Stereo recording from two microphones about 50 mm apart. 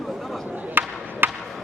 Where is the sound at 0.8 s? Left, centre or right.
Right.